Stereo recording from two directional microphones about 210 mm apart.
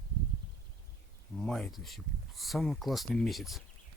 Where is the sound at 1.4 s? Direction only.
Centre (ahead or behind).